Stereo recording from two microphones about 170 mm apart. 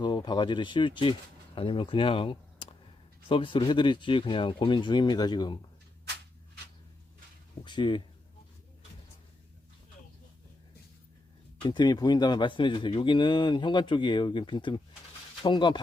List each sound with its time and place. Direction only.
0.0 s speech: 25° left (ahead or behind)
7.6 s speech: 25° left (ahead or behind)
11.6 s speech: 25° left (ahead or behind)